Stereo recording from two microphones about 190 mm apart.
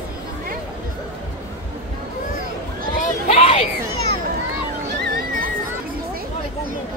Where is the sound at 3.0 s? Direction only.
30° left (ahead or behind).